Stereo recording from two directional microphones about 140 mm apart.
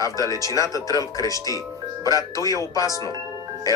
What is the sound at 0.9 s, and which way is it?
Speech, 25° left (ahead or behind).